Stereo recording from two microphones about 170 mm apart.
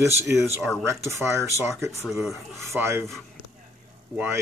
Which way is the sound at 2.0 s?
Centre (ahead or behind).